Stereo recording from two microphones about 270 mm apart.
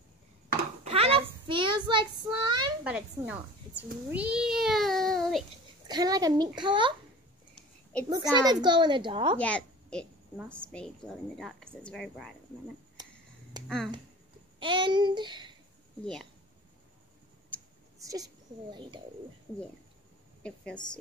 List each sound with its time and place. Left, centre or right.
0.8 s child singing: right
2.8 s speech: centre
4.1 s cat: centre
5.9 s a child's voice: centre
7.5 s a sound: centre
8.1 s a child's voice: centre
9.4 s a child's voice: centre
13.5 s a sound: centre
14.6 s a child's voice: centre
17.9 s a child's voice: centre
20.4 s speech: centre